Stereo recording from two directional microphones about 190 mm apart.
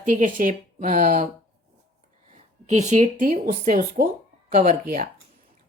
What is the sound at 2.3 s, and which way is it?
A woman's voice, 35° right (ahead or behind).